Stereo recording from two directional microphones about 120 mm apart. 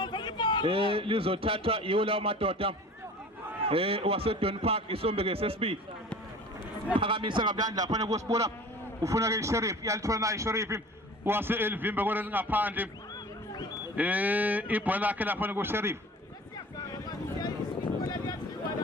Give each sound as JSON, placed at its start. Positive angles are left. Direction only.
{"t": 0.0, "sound": "a sound", "side_deg": 40}
{"t": 0.6, "sound": "a man's voice", "side_deg": -50}
{"t": 7.0, "sound": "music", "side_deg": -45}
{"t": 9.0, "sound": "a man's voice", "side_deg": -25}
{"t": 13.9, "sound": "a man's voice", "side_deg": -15}
{"t": 18.0, "sound": "a sound", "side_deg": 30}